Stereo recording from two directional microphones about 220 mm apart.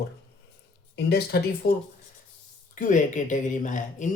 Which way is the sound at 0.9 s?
45° left (ahead or behind).